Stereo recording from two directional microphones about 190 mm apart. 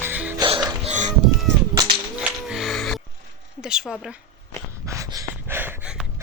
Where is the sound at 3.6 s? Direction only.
5° right (ahead or behind).